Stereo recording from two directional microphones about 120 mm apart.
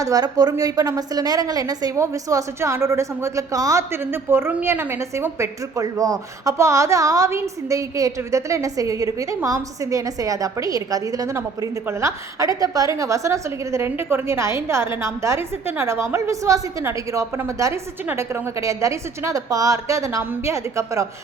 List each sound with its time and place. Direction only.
0.0 s a woman's voice: 30° right (ahead or behind)